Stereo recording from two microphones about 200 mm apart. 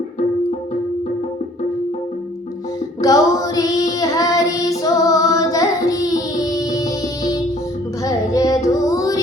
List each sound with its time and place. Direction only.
3.0 s child singing: 15° left (ahead or behind)
8.0 s music: 15° left (ahead or behind)